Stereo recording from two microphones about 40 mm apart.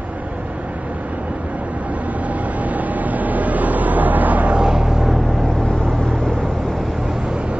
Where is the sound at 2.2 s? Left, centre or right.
Right.